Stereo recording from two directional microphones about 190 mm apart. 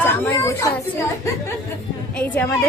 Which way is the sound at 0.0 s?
10° left (ahead or behind).